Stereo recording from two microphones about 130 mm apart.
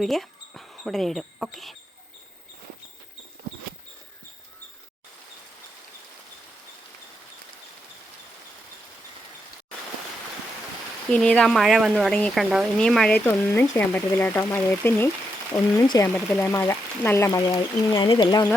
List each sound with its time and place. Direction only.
0.0 s speech: centre (ahead or behind)
11.1 s speech: 10° left (ahead or behind)
13.1 s speech: 15° left (ahead or behind)
15.5 s speech: 25° left (ahead or behind)
16.1 s speech: 10° left (ahead or behind)
16.5 s speech: 20° left (ahead or behind)
17.9 s speech: 35° left (ahead or behind)